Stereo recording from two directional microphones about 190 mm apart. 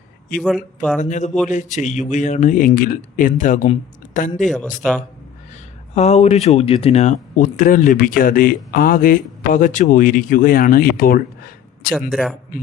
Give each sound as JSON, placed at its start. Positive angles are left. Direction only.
{"t": 0.4, "sound": "speech", "side_deg": 0}
{"t": 0.9, "sound": "a man's voice", "side_deg": 40}
{"t": 4.4, "sound": "speech", "side_deg": 0}
{"t": 5.9, "sound": "speech", "side_deg": 35}
{"t": 12.1, "sound": "speech", "side_deg": 0}